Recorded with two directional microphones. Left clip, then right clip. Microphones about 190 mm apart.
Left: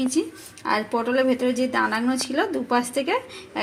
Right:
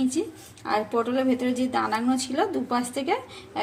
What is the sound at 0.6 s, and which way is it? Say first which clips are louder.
Speech: left 2 dB; 30° left (ahead or behind).